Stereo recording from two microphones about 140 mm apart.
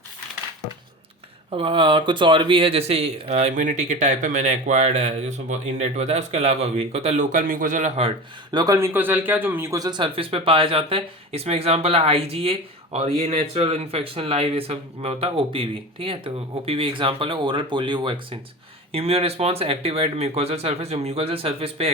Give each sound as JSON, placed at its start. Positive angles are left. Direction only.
{"t": 1.5, "sound": "speech", "side_deg": -40}
{"t": 8.5, "sound": "speech", "side_deg": -25}